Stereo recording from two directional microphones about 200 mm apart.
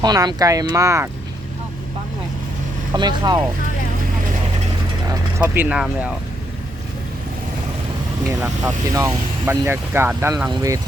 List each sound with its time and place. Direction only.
0.0 s speech: 20° right (ahead or behind)
2.9 s speech: 20° right (ahead or behind)
5.4 s speech: 5° right (ahead or behind)
8.4 s speech: 15° right (ahead or behind)